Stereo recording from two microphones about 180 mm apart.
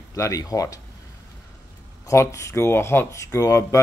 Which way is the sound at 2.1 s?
15° left (ahead or behind).